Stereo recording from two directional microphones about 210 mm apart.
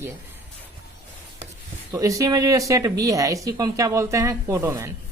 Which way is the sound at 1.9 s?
15° right (ahead or behind).